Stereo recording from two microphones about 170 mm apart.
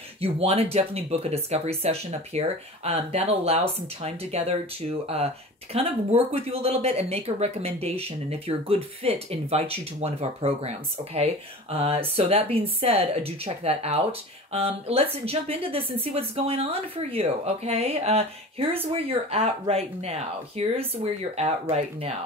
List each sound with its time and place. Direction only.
0.2 s speech: 35° right (ahead or behind)
11.7 s speech: 35° right (ahead or behind)